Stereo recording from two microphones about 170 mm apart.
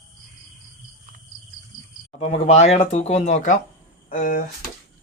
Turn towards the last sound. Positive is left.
turn(degrees=55)  # may be behind; listen again after turning